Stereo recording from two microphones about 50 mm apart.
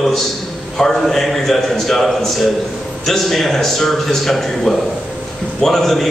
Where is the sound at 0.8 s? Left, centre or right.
Centre.